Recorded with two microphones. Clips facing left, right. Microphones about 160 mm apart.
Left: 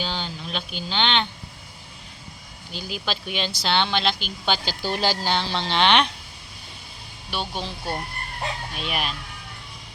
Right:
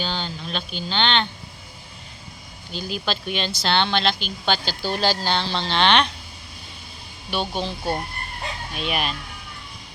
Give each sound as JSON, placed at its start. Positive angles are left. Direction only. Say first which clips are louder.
{"t": 0.0, "sound": "speech", "louder": "right 1 dB", "side_deg": 10}
{"t": 2.7, "sound": "speech", "louder": "right 3 dB", "side_deg": 10}
{"t": 7.3, "sound": "speech", "louder": "right 4 dB", "side_deg": 5}
{"t": 8.7, "sound": "speech", "louder": "right 3 dB", "side_deg": 0}